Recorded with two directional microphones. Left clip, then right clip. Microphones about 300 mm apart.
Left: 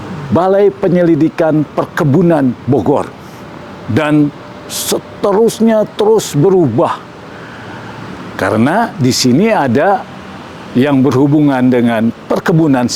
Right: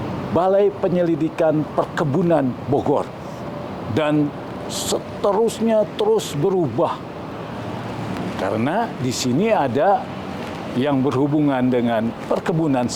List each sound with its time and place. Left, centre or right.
0.3 s speech: left
8.4 s speech: left